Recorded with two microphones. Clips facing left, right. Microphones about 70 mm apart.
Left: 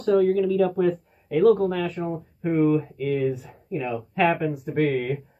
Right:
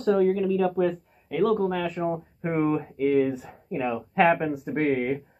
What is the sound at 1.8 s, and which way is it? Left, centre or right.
Speech, right.